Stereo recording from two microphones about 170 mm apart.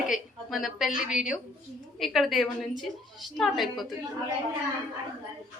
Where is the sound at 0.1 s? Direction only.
Centre (ahead or behind).